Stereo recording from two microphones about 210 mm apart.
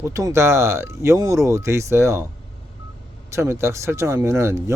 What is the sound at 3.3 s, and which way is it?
Speech, 15° right (ahead or behind).